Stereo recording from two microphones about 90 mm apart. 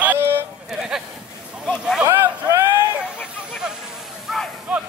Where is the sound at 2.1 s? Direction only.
35° right (ahead or behind).